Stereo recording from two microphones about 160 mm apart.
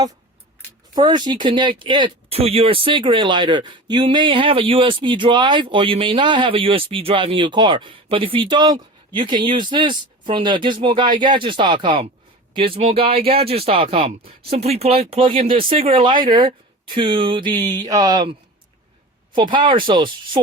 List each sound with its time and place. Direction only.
0.9 s speech: 25° right (ahead or behind)